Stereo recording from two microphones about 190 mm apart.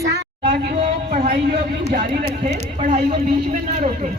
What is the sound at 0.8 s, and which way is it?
Speech, 35° right (ahead or behind).